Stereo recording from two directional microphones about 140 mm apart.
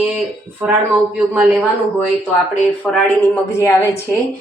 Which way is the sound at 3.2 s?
20° left (ahead or behind).